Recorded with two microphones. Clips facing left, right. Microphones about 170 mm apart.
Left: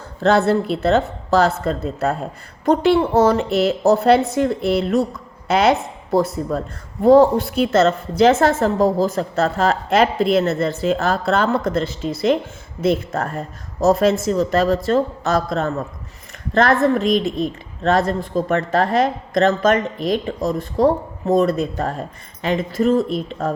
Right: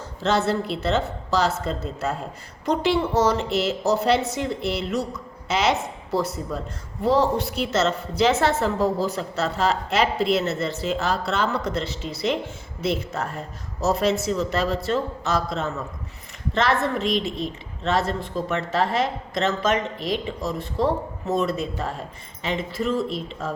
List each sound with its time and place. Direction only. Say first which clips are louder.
0.2 s a woman's voice: left 7 dB; 55° left (ahead or behind)